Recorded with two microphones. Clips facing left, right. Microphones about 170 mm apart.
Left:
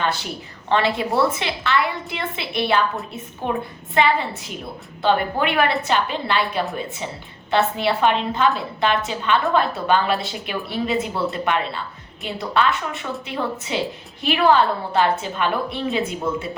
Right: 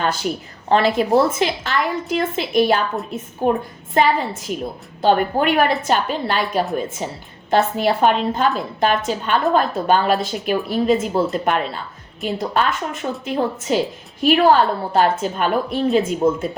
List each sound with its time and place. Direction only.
0.0 s a woman's voice: 45° right (ahead or behind)